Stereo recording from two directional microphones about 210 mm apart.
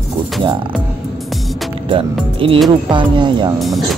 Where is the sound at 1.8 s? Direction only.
25° right (ahead or behind).